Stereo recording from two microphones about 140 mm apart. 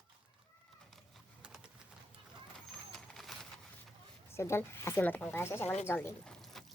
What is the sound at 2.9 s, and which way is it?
Vehicle, centre (ahead or behind).